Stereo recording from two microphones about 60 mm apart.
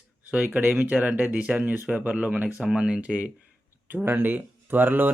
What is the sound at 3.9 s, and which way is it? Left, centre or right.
Speech, right.